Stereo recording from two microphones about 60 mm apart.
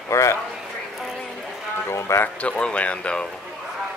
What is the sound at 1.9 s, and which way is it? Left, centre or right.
Speech, left.